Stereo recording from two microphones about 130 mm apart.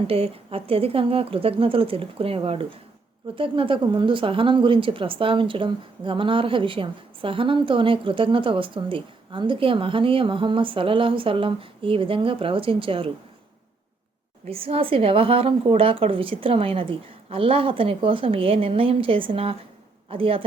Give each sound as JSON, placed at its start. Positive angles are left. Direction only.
{"t": 0.1, "sound": "speech", "side_deg": -45}
{"t": 14.4, "sound": "speech", "side_deg": -50}